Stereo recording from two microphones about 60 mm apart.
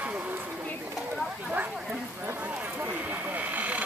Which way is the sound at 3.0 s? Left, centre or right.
Right.